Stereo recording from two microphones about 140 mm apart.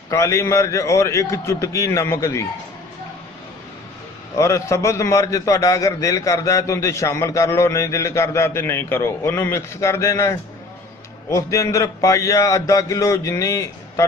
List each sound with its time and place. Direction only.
0.1 s a man's voice: 20° left (ahead or behind)
4.4 s a man's voice: 20° left (ahead or behind)